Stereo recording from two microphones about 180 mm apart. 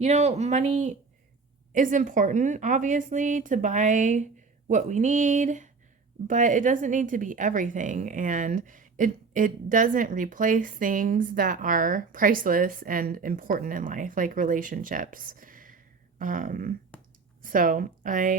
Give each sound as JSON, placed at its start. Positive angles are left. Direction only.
{"t": 0.0, "sound": "speech", "side_deg": -40}
{"t": 16.9, "sound": "a sound", "side_deg": 10}
{"t": 17.4, "sound": "speech", "side_deg": -50}